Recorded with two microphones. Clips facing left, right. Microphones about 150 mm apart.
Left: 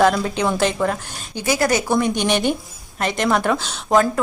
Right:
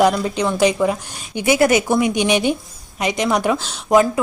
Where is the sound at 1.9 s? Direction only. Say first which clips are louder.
Right 2 dB; 10° right (ahead or behind).